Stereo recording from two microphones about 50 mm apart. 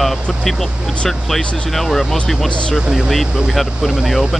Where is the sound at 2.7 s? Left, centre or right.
Centre.